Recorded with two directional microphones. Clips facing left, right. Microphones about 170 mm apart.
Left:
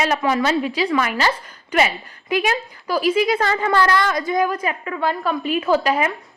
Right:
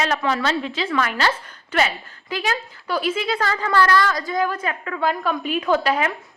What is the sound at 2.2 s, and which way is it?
A woman's voice, 20° left (ahead or behind).